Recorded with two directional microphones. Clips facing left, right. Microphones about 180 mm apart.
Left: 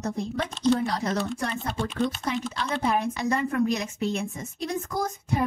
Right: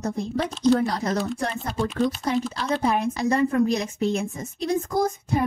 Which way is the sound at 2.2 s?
35° right (ahead or behind).